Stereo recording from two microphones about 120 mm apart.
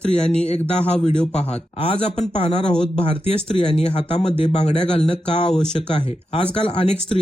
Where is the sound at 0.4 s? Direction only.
65° left (ahead or behind).